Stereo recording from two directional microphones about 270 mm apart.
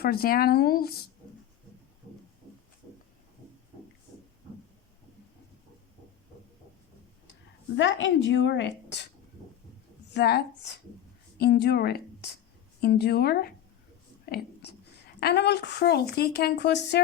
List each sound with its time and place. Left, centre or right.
0.0 s a woman's voice: left
7.8 s a woman's voice: left
10.2 s a woman's voice: left
14.3 s whispering: left
15.2 s a woman's voice: left